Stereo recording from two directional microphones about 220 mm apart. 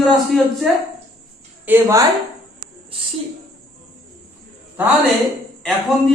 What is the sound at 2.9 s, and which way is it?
Speech, 25° right (ahead or behind).